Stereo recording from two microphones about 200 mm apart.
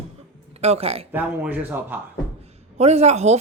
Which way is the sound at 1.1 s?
10° right (ahead or behind).